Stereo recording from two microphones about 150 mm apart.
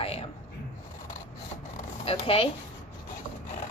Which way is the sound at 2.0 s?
40° left (ahead or behind).